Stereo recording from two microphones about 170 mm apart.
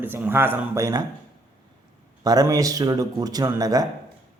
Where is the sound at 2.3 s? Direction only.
20° right (ahead or behind).